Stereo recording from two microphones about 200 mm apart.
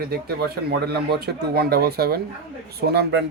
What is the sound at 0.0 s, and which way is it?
Speech, 50° right (ahead or behind).